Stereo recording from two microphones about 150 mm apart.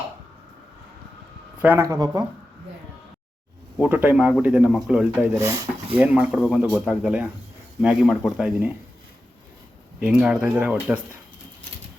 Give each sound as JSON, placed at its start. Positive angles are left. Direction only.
{"t": 1.6, "sound": "speech", "side_deg": -15}
{"t": 3.8, "sound": "speech", "side_deg": -10}
{"t": 5.4, "sound": "speech", "side_deg": -20}
{"t": 6.0, "sound": "speech", "side_deg": -10}
{"t": 10.0, "sound": "speech", "side_deg": -5}